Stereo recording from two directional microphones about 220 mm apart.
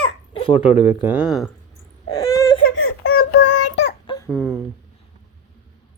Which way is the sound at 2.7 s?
65° left (ahead or behind).